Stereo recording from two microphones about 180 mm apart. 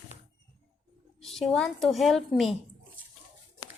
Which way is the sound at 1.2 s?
Centre (ahead or behind).